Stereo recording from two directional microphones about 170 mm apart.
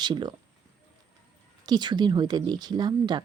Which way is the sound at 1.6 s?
25° right (ahead or behind).